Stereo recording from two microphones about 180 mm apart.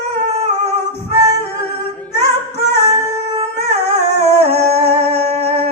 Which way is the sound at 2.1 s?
60° left (ahead or behind).